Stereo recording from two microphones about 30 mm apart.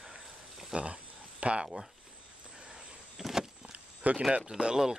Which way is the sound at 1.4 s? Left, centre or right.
Right.